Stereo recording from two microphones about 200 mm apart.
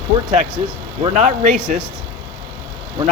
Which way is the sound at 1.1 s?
35° right (ahead or behind).